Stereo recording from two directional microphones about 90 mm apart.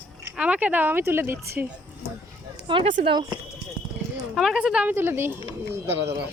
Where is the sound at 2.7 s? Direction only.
70° right (ahead or behind).